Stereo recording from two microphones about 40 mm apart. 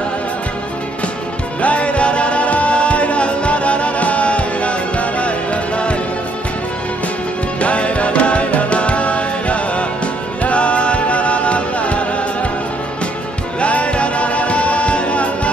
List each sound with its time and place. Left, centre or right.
1.6 s music: left
7.6 s music: left
13.6 s music: left